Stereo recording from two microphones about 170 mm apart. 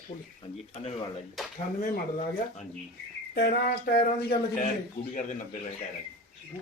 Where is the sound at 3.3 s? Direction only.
65° left (ahead or behind).